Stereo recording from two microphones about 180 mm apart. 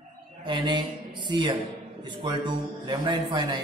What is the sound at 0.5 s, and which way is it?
Music, 25° right (ahead or behind).